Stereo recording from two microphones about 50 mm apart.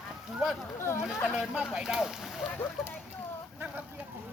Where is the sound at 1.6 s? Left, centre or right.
Centre.